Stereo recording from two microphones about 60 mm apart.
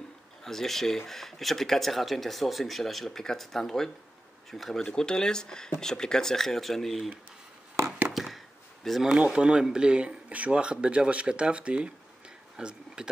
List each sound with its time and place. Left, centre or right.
0.4 s speech: centre
8.1 s a sound: centre
8.8 s speech: centre
9.2 s speech: centre